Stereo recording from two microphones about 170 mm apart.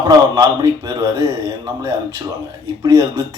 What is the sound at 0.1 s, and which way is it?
A man's voice, 20° right (ahead or behind).